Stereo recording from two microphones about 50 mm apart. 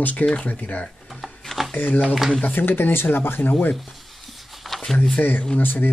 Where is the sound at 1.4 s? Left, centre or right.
Centre.